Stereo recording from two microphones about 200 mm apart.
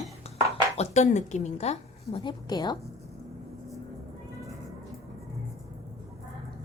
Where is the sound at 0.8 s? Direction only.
35° left (ahead or behind).